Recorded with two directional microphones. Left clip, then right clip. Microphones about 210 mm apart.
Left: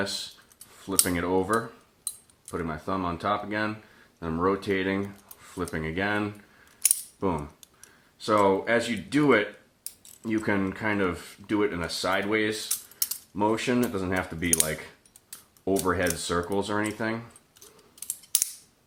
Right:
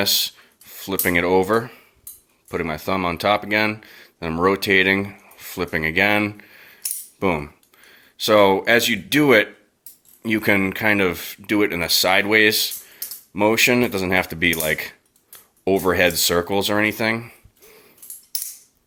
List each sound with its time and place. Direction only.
0.8 s speech: 35° right (ahead or behind)
7.2 s coin: 30° right (ahead or behind)
8.3 s speech: 35° right (ahead or behind)